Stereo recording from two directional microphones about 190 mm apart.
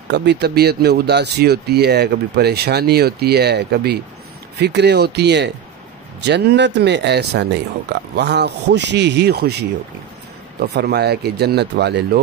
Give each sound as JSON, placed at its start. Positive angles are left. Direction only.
{"t": 0.1, "sound": "speech", "side_deg": -65}
{"t": 10.7, "sound": "speech", "side_deg": -60}